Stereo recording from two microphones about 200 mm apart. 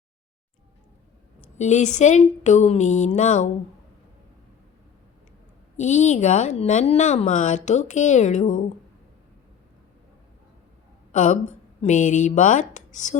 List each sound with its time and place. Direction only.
1.5 s a woman's voice: 35° left (ahead or behind)
5.7 s a woman's voice: 35° left (ahead or behind)
11.1 s a woman's voice: 40° left (ahead or behind)